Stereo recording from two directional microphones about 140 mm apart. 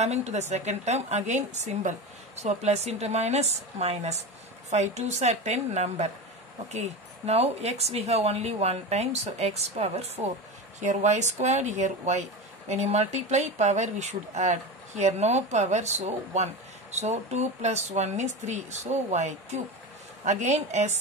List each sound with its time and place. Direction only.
0.0 s speech: 50° right (ahead or behind)
7.2 s speech: 50° right (ahead or behind)